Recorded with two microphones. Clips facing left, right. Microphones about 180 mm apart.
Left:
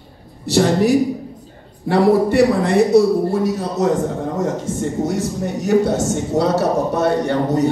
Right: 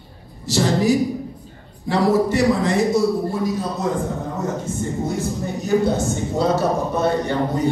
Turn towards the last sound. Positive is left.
turn(degrees=75)  # may be behind; listen again after turning